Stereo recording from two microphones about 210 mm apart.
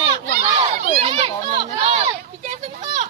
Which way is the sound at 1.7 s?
30° right (ahead or behind).